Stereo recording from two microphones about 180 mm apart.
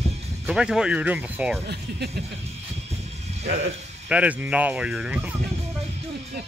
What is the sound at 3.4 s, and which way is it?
Speech, 70° right (ahead or behind).